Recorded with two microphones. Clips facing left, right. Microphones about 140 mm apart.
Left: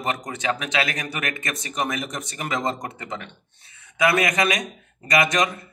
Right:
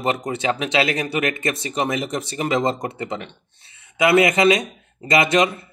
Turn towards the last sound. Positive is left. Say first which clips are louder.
# right 4 dB
turn(degrees=-30)  # may be behind; listen again after turning